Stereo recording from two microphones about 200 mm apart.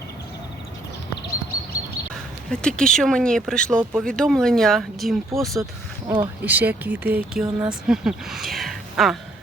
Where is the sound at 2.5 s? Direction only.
5° left (ahead or behind).